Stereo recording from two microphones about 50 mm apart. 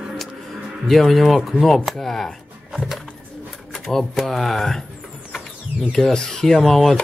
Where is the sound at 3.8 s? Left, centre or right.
Centre.